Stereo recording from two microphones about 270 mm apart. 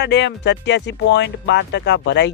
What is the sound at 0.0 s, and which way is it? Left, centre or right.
Speech, left.